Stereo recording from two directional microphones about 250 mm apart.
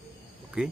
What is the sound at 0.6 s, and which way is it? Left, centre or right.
Speech, centre.